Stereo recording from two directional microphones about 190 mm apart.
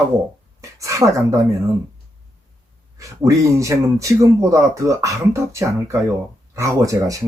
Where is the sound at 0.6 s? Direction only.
15° right (ahead or behind).